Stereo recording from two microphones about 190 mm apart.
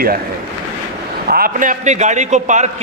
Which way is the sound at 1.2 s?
50° right (ahead or behind).